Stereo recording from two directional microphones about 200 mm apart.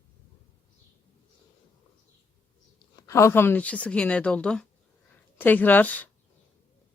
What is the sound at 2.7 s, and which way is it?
A woman's voice, 15° left (ahead or behind).